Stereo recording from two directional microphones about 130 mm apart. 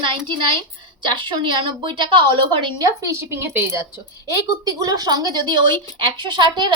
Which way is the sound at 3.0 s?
20° right (ahead or behind).